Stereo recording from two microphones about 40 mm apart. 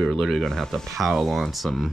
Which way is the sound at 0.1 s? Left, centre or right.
Centre.